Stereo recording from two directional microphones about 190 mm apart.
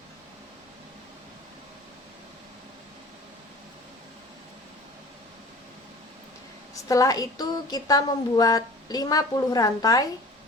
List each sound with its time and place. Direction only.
6.8 s speech: 15° left (ahead or behind)